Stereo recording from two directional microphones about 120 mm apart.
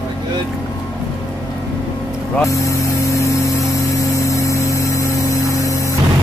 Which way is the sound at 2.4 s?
25° left (ahead or behind).